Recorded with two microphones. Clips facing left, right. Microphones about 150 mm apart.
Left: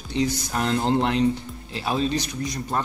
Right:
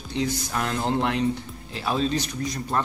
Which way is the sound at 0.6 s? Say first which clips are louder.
Left 4 dB; 30° left (ahead or behind).